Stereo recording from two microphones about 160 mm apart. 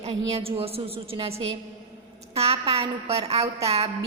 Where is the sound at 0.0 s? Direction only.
40° right (ahead or behind).